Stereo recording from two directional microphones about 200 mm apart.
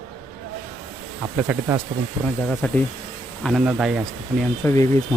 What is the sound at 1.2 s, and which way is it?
Speech, 5° right (ahead or behind).